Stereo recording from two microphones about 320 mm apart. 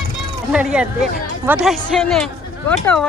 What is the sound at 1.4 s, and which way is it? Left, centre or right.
Speech, centre.